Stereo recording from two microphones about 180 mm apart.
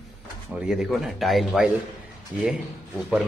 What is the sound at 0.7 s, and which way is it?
Speech, centre (ahead or behind).